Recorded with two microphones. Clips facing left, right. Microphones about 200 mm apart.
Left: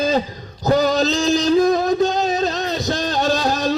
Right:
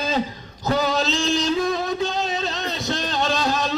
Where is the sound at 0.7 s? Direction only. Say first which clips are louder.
Left 5 dB; 40° left (ahead or behind).